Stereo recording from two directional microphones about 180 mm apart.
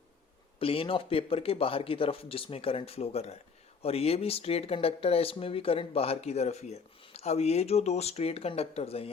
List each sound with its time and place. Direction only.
0.6 s speech: 30° left (ahead or behind)